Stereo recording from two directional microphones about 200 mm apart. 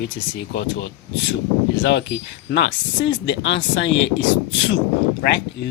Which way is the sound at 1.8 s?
65° left (ahead or behind).